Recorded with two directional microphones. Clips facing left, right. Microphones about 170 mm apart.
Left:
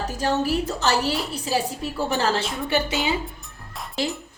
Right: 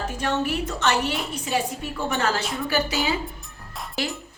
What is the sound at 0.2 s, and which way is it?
A woman's voice, 35° left (ahead or behind).